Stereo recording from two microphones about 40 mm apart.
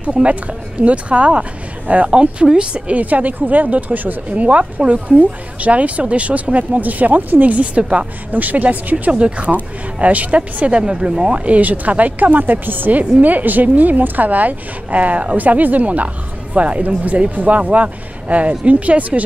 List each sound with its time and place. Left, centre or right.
0.0 s speech: right
3.0 s a woman's voice: right
4.4 s speech: right
8.3 s a woman's voice: right
9.1 s speech: right
10.7 s speech: right
11.4 s a woman's voice: right